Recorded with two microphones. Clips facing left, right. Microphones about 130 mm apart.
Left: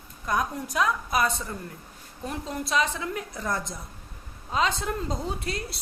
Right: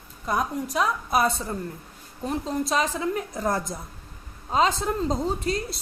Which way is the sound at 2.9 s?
40° right (ahead or behind).